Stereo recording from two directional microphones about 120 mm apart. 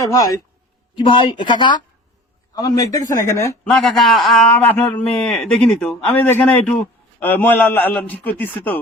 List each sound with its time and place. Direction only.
0.1 s speech: 30° left (ahead or behind)
0.9 s speech: 45° left (ahead or behind); by 3.6 s 25° left (ahead or behind)
3.6 s a man's voice: 5° left (ahead or behind)
4.8 s speech: 15° left (ahead or behind)